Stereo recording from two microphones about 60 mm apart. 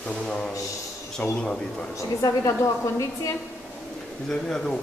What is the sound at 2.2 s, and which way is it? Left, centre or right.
Speech, left.